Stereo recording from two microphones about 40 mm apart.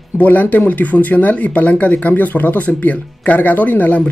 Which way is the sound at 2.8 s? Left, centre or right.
Left.